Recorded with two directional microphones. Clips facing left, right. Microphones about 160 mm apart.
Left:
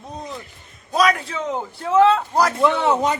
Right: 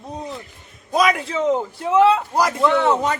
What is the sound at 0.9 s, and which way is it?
A man's voice, 20° right (ahead or behind).